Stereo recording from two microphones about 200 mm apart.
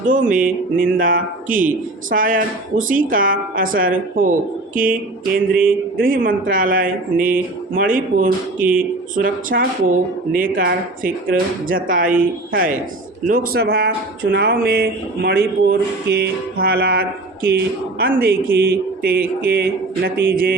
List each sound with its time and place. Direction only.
0.0 s speech: 40° right (ahead or behind)